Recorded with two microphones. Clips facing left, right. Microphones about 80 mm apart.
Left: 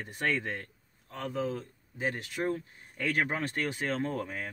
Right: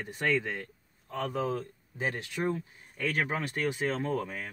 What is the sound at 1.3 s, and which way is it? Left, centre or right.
Speech, right.